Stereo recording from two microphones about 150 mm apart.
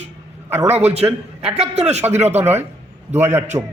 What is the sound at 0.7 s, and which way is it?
Speech, 45° right (ahead or behind).